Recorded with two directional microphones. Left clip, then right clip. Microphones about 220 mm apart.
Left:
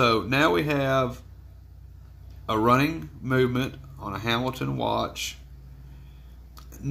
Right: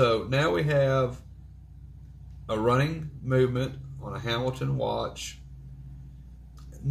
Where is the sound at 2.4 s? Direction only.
55° left (ahead or behind).